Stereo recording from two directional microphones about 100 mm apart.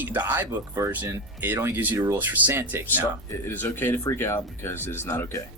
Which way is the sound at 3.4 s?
20° left (ahead or behind).